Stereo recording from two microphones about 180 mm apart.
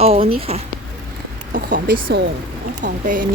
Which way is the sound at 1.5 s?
50° right (ahead or behind).